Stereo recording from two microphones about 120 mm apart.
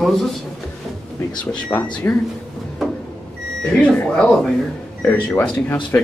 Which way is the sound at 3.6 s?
10° left (ahead or behind).